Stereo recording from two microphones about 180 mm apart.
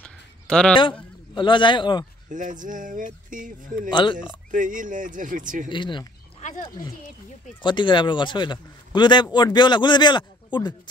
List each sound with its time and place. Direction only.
0.0 s a sound: 5° left (ahead or behind)
1.3 s a man's voice: 25° left (ahead or behind)
2.2 s speech: 45° right (ahead or behind)
3.9 s a man's voice: 25° left (ahead or behind)
4.5 s speech: 45° right (ahead or behind)
5.7 s a man's voice: 25° left (ahead or behind)
7.6 s a man's voice: 25° left (ahead or behind)